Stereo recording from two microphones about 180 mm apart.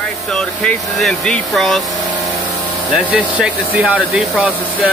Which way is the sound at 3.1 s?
5° right (ahead or behind).